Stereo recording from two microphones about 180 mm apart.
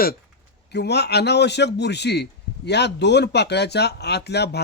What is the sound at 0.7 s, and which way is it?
Speech, 65° left (ahead or behind).